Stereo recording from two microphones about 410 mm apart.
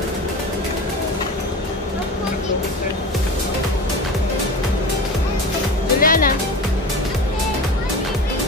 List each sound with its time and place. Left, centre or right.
5.9 s music: centre